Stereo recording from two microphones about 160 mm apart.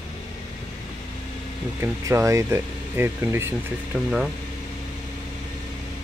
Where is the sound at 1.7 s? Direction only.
20° right (ahead or behind).